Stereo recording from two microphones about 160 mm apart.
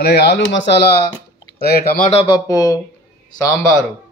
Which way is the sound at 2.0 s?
35° left (ahead or behind).